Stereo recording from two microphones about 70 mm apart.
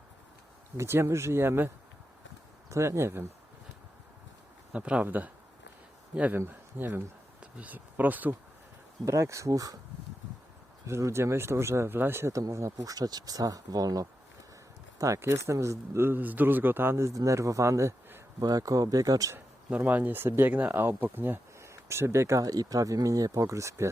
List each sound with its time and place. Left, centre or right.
0.8 s a man's voice: right
2.6 s speech: right
4.7 s speech: centre
6.3 s speech: right
9.0 s speech: right
10.8 s a man's voice: right
12.3 s a man's voice: right
17.2 s speech: right
18.3 s speech: right
19.7 s speech: right
20.5 s a man's voice: right
21.6 s speech: right